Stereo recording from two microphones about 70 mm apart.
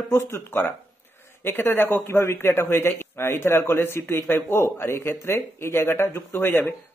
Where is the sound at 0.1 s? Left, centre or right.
Left.